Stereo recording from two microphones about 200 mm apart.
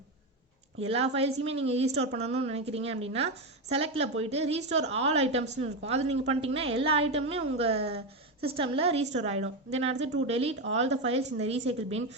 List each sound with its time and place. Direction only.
0.8 s a woman's voice: 30° right (ahead or behind)